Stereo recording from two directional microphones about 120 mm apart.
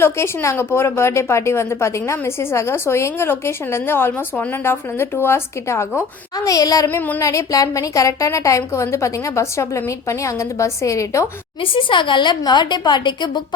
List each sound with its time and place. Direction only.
0.0 s a woman's voice: 20° left (ahead or behind)
6.8 s child singing: 15° left (ahead or behind)
7.3 s a woman's voice: 30° left (ahead or behind)
11.6 s a woman's voice: 45° left (ahead or behind)